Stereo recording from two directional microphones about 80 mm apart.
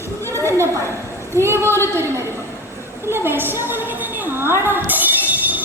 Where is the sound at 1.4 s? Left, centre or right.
Right.